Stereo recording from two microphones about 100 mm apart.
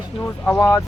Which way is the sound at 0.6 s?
35° left (ahead or behind).